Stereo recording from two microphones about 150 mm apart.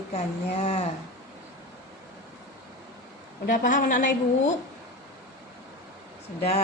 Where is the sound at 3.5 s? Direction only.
60° left (ahead or behind).